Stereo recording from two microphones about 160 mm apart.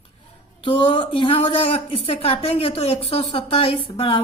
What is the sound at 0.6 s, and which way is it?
Speech, 30° left (ahead or behind).